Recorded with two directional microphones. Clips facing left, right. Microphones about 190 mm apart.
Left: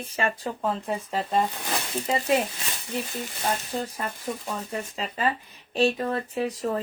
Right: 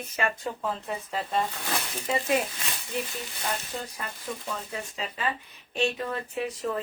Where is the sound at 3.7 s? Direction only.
35° left (ahead or behind).